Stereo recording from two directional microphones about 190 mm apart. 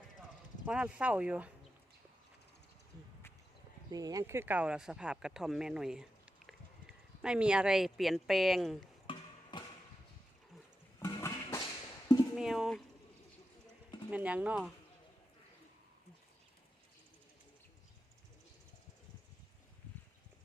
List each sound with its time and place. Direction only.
0.6 s speech: 5° right (ahead or behind)
3.9 s speech: 20° right (ahead or behind); by 8.8 s centre (ahead or behind)
9.0 s chop: 25° left (ahead or behind)
11.0 s music: 15° left (ahead or behind)
12.4 s speech: centre (ahead or behind)
14.1 s speech: 5° right (ahead or behind)